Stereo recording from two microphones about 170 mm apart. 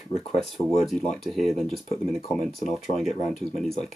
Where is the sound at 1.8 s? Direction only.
40° left (ahead or behind).